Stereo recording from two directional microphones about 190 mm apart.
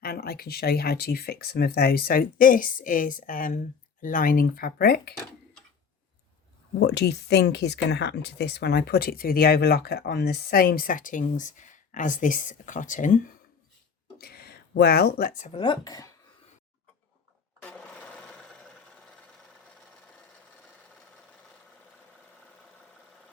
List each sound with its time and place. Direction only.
0.0 s speech: 55° left (ahead or behind)
6.7 s speech: 65° left (ahead or behind); by 13.2 s 45° left (ahead or behind)
14.2 s speech: 55° left (ahead or behind)
15.5 s speech: 25° left (ahead or behind)
17.6 s sewing machine: 5° left (ahead or behind)